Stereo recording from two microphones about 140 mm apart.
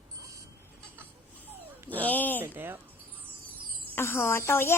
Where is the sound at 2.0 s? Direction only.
10° left (ahead or behind).